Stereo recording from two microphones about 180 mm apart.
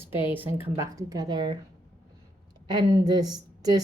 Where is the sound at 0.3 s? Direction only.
10° right (ahead or behind).